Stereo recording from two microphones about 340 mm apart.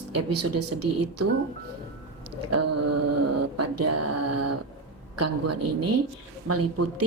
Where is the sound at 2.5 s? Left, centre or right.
Right.